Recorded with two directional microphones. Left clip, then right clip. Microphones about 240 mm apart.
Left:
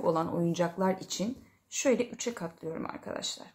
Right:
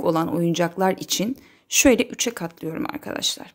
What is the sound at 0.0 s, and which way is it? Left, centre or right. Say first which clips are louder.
A woman's voice: right 7 dB; right.